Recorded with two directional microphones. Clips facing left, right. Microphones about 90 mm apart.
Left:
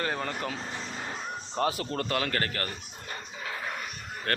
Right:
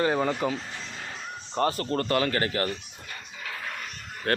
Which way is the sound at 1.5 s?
5° left (ahead or behind).